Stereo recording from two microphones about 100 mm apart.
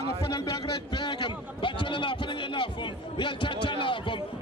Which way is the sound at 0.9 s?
50° left (ahead or behind).